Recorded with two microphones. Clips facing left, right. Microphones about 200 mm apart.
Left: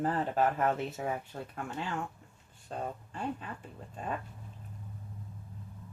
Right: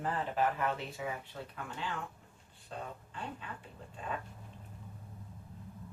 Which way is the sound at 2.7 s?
45° left (ahead or behind).